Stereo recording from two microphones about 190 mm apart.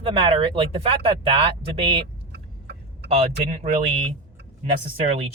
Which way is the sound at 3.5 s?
35° right (ahead or behind).